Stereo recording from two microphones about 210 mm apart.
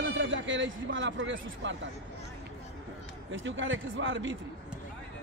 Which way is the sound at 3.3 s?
65° right (ahead or behind).